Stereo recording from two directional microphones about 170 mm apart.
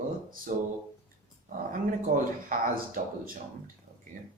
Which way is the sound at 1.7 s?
50° right (ahead or behind).